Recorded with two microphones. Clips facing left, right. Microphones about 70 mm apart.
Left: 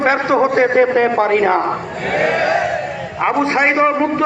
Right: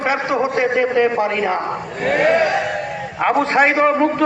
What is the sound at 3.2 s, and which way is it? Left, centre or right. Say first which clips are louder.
A man's voice: even; centre.